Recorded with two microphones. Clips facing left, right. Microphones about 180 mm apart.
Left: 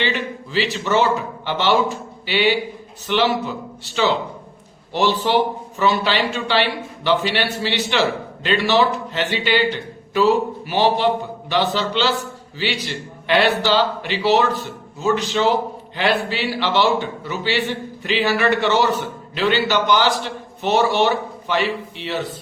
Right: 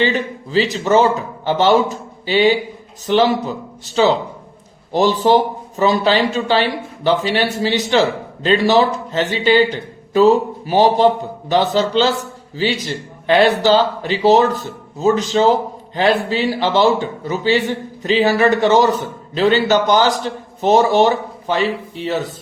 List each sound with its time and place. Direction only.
0.0 s a man's voice: 40° right (ahead or behind)